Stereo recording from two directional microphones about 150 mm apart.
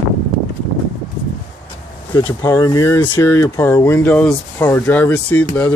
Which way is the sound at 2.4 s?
20° left (ahead or behind).